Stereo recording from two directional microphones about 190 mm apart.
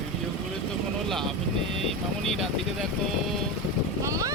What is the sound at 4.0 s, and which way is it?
Vehicle, 15° right (ahead or behind).